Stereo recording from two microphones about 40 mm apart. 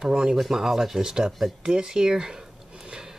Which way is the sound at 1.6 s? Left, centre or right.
Centre.